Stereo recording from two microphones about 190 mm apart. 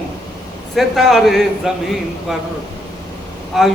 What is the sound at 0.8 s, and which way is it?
Speech, centre (ahead or behind).